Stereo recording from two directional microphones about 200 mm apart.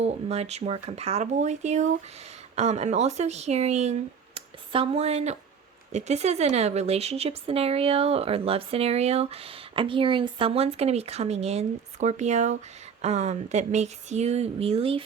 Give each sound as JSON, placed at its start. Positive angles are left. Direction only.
{"t": 0.0, "sound": "speech", "side_deg": -30}